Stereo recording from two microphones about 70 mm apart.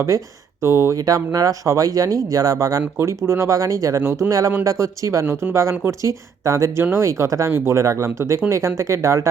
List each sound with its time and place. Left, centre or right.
0.1 s speech: right
0.6 s speech: right
1.0 s speech: right
3.0 s speech: right